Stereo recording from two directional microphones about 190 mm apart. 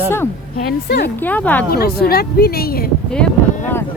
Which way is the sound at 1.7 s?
55° left (ahead or behind).